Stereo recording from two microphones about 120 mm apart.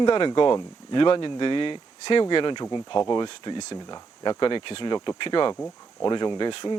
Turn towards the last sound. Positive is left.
turn(degrees=40)  # may be behind; listen again after turning